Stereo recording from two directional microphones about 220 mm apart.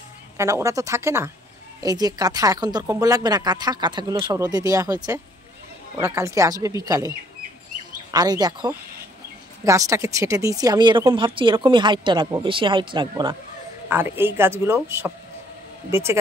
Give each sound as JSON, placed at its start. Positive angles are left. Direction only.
{"t": 0.4, "sound": "speech", "side_deg": -15}
{"t": 13.8, "sound": "speech", "side_deg": -10}